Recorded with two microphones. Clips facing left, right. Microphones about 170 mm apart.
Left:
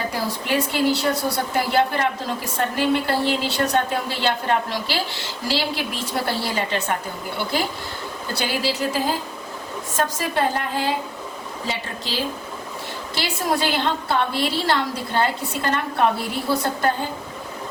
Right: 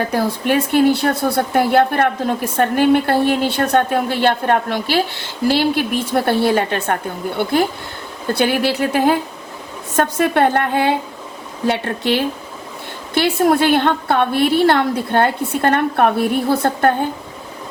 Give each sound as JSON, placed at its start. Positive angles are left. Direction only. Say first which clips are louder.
{"t": 0.1, "sound": "speech", "louder": "right 7 dB", "side_deg": -55}